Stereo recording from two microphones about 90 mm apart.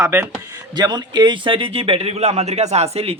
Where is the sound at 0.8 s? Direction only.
50° right (ahead or behind); by 2.1 s 90° right.